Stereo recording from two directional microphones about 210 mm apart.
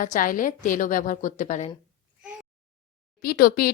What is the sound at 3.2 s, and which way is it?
Speech, 45° left (ahead or behind).